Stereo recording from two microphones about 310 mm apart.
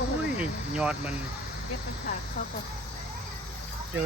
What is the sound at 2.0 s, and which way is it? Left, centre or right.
Speech, left.